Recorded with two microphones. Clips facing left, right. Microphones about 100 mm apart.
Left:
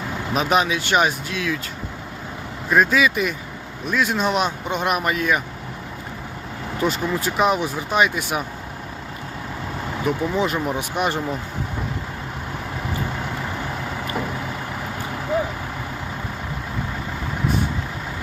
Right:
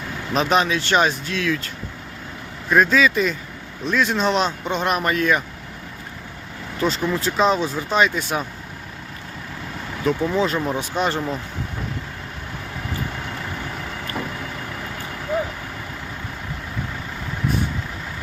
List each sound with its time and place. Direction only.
0.3 s speech: 10° left (ahead or behind)
2.6 s speech: 5° left (ahead or behind)
6.7 s speech: 15° left (ahead or behind)
10.1 s speech: 15° left (ahead or behind)